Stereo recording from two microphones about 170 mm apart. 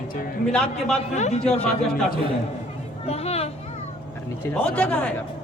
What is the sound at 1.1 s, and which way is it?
Speech, 40° left (ahead or behind).